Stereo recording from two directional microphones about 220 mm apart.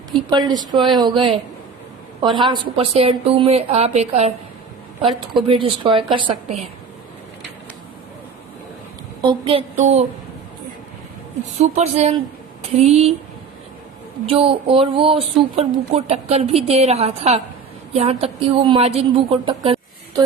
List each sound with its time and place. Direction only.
0.3 s a woman's voice: 20° right (ahead or behind)
9.2 s a woman's voice: 25° right (ahead or behind)
11.6 s a woman's voice: 30° right (ahead or behind)
14.3 s a woman's voice: 25° right (ahead or behind)